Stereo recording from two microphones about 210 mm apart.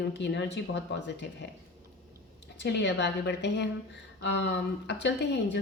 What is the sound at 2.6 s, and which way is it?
Speech, 55° left (ahead or behind).